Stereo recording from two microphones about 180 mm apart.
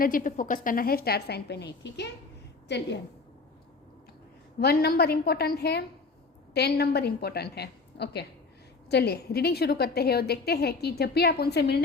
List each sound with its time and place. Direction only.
0.0 s a woman's voice: 50° left (ahead or behind); by 3.0 s 70° left (ahead or behind)
4.6 s a woman's voice: 60° left (ahead or behind)